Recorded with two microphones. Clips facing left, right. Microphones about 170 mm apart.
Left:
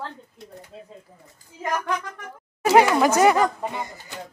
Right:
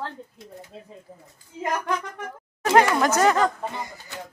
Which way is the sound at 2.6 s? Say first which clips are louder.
Left 2 dB; 10° left (ahead or behind).